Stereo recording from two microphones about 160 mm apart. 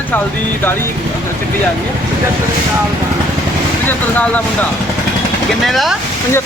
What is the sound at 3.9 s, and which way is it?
Speech, 10° left (ahead or behind).